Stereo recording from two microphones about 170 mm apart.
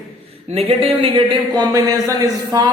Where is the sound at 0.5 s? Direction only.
35° right (ahead or behind).